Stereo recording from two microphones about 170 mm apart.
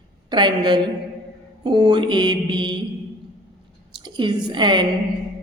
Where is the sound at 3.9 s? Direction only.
25° right (ahead or behind).